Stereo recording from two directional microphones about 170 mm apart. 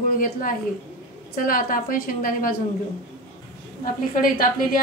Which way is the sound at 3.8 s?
55° left (ahead or behind).